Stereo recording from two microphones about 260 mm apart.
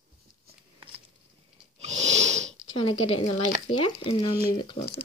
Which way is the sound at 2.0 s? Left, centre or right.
Right.